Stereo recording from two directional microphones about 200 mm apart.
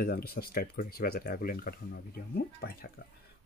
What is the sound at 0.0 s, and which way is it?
Speech, 50° left (ahead or behind).